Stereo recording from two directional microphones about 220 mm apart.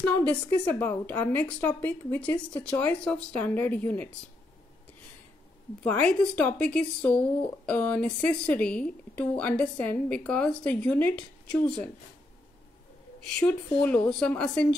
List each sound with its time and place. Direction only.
0.0 s a woman's voice: 5° left (ahead or behind)
5.9 s speech: 5° left (ahead or behind)
13.3 s speech: 5° left (ahead or behind)